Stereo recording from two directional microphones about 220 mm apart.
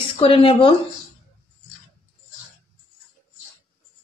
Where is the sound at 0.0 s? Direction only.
25° left (ahead or behind).